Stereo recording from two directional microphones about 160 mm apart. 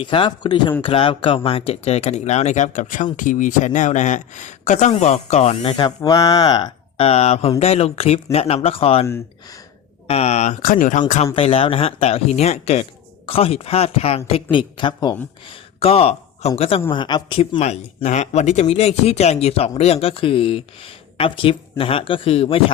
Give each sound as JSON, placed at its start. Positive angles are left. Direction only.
{"t": 0.0, "sound": "speech", "side_deg": 30}
{"t": 10.1, "sound": "speech", "side_deg": 40}
{"t": 11.3, "sound": "speech", "side_deg": 35}
{"t": 15.8, "sound": "a sound", "side_deg": 40}
{"t": 16.6, "sound": "speech", "side_deg": 35}
{"t": 17.6, "sound": "speech", "side_deg": 45}